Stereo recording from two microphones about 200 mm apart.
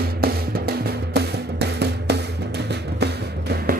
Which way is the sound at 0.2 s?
50° right (ahead or behind).